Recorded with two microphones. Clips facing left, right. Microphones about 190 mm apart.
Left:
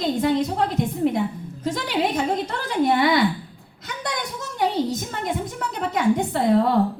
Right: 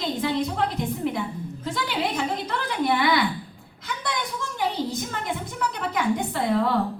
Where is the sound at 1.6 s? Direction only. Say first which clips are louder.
Left 4 dB; 40° left (ahead or behind).